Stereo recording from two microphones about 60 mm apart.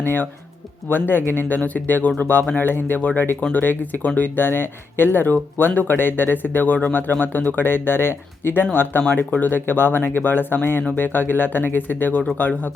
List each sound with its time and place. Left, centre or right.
0.0 s speech: left